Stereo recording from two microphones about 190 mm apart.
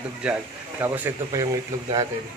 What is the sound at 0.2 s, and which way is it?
Speech, 10° right (ahead or behind).